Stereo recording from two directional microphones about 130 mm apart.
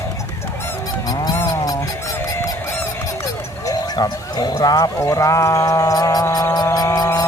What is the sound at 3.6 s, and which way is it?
Speech, 30° left (ahead or behind).